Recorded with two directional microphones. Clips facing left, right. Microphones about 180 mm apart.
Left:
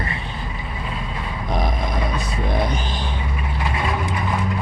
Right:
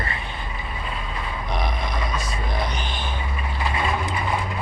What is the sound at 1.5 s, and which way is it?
Grunt, 45° left (ahead or behind).